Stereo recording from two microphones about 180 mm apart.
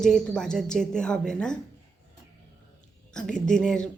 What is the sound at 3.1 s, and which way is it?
Speech, 5° left (ahead or behind).